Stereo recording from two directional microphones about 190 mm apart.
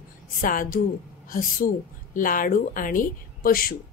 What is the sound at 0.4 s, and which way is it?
A woman's voice, 45° left (ahead or behind).